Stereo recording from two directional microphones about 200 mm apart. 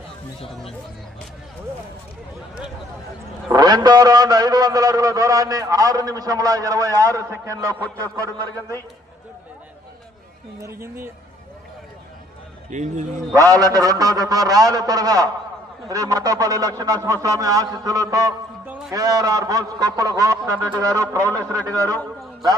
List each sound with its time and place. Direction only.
3.5 s a man's voice: 20° right (ahead or behind)
10.6 s a man's voice: 15° right (ahead or behind)
12.7 s speech: 35° right (ahead or behind)
13.3 s a man's voice: 15° right (ahead or behind)